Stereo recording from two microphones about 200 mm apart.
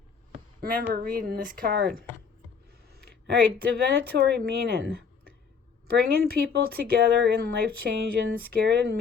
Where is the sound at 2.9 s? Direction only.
50° right (ahead or behind).